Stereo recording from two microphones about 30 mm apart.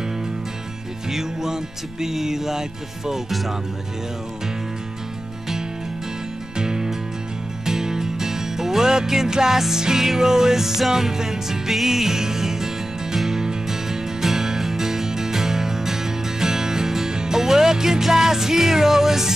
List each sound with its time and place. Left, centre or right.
1.1 s music: centre
6.6 s music: right